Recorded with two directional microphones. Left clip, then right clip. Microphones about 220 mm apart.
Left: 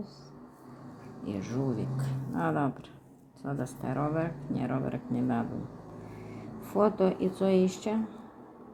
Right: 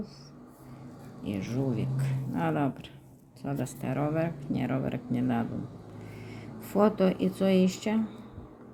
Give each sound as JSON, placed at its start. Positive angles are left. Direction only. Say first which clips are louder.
{"t": 1.2, "sound": "speech", "louder": "right 1 dB", "side_deg": -15}
{"t": 6.6, "sound": "speech", "louder": "right 1 dB", "side_deg": -20}